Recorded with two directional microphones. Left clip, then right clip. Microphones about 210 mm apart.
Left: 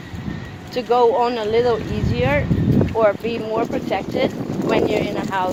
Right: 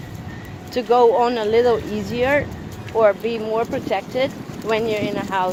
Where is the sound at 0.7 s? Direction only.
20° right (ahead or behind).